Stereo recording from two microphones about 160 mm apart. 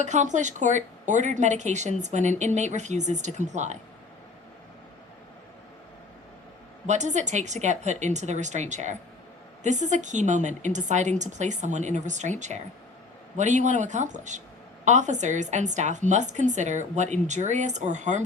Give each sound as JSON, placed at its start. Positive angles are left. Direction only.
{"t": 0.0, "sound": "a woman's voice", "side_deg": -50}
{"t": 6.8, "sound": "a woman's voice", "side_deg": -45}